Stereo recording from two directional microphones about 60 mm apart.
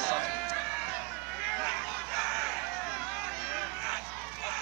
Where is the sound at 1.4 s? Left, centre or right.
Centre.